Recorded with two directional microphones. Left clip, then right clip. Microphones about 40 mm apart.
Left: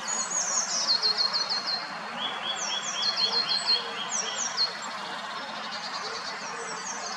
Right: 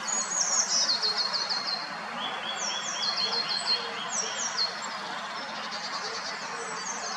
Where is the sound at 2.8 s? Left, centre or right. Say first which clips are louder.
Left 3 dB; left.